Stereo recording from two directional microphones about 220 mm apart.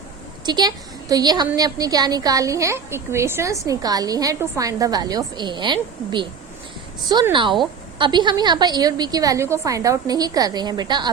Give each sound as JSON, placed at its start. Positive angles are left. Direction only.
{"t": 0.4, "sound": "a woman's voice", "side_deg": -20}